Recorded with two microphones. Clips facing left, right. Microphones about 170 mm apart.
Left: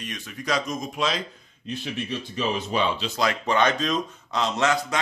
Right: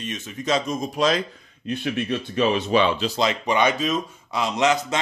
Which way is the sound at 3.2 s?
20° right (ahead or behind).